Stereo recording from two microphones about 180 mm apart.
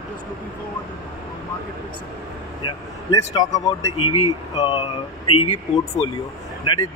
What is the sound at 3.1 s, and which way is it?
Speech, 20° left (ahead or behind).